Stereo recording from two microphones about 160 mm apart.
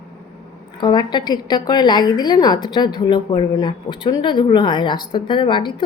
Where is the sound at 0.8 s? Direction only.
30° left (ahead or behind).